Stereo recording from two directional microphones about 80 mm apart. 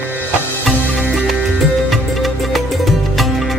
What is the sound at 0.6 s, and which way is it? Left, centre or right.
Music, centre.